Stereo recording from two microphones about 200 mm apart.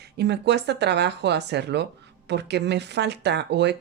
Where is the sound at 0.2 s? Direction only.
55° right (ahead or behind).